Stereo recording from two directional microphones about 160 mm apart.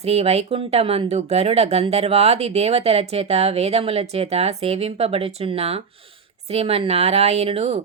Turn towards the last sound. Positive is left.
turn(degrees=-40)  # may be behind; listen again after turning